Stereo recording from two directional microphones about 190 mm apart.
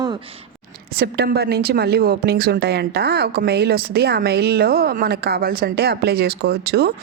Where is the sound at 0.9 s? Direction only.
60° right (ahead or behind).